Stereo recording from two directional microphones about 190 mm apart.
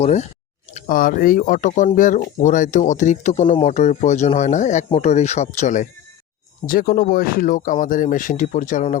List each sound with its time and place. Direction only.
0.0 s speech: 35° left (ahead or behind)
6.7 s speech: 50° left (ahead or behind)